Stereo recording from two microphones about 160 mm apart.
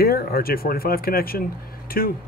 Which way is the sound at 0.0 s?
70° left (ahead or behind).